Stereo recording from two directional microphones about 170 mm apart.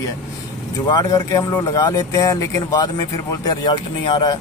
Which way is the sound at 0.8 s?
25° left (ahead or behind).